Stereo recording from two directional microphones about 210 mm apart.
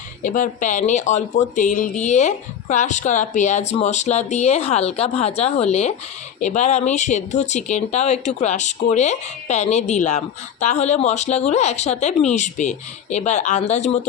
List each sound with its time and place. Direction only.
0.2 s speech: 40° left (ahead or behind)